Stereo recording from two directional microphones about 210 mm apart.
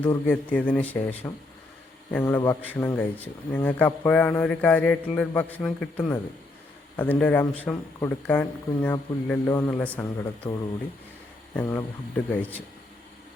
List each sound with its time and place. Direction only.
0.0 s speech: 5° left (ahead or behind)
10.4 s speech: 25° left (ahead or behind)
11.5 s speech: 10° left (ahead or behind)